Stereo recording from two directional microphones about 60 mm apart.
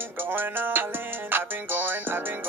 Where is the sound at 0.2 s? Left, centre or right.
Right.